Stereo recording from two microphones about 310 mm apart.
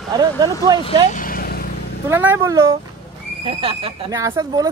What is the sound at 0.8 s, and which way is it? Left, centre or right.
Vehicle, left.